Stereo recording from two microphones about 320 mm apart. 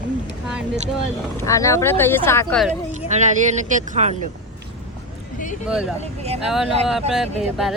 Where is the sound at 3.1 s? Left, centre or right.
Right.